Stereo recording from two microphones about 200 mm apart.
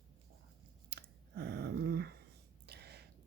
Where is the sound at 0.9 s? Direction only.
55° right (ahead or behind).